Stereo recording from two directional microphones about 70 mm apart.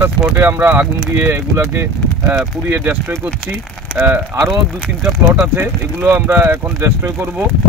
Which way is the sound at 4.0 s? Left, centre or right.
Right.